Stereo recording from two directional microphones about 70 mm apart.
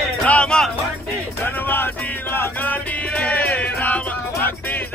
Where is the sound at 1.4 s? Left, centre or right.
Left.